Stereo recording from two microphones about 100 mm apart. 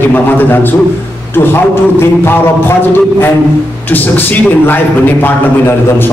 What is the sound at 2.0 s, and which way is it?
A man's voice, 25° left (ahead or behind).